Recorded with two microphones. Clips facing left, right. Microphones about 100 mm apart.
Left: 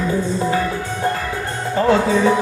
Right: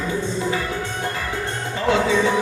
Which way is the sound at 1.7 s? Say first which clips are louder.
Left 4 dB; 40° left (ahead or behind).